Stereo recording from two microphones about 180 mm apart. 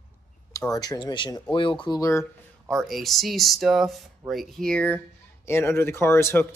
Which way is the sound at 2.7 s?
Centre (ahead or behind).